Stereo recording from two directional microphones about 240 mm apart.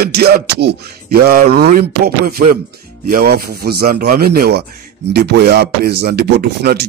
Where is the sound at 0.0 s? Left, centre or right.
Right.